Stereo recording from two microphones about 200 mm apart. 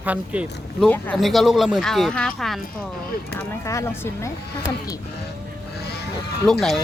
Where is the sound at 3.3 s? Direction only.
15° left (ahead or behind).